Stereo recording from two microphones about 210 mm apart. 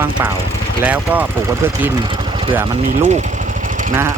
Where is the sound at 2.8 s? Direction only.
35° right (ahead or behind).